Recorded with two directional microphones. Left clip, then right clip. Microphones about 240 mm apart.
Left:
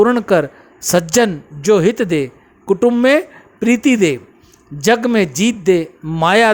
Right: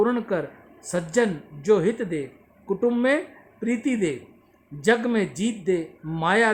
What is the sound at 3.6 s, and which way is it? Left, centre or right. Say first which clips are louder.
Speech: left 12 dB; left.